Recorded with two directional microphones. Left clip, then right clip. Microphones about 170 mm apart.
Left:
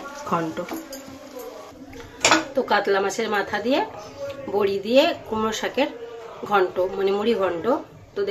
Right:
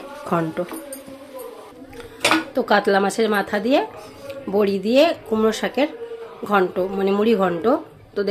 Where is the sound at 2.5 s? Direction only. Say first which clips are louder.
Right 3 dB; 45° right (ahead or behind).